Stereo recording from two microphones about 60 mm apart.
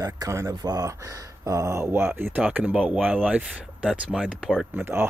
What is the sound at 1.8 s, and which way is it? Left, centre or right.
Speech, right.